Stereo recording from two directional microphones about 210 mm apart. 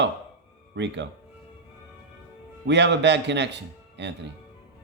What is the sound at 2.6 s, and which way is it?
A man's voice, 55° right (ahead or behind).